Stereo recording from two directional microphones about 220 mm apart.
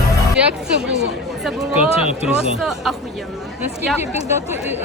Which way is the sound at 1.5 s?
Centre (ahead or behind).